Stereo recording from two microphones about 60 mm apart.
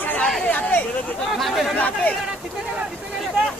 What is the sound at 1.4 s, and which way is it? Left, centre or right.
Chatter, centre.